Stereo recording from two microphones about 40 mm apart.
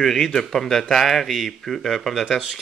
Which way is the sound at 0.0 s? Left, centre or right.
Centre.